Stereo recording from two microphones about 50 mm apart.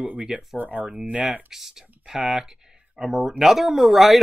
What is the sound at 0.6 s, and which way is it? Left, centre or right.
Speech, right.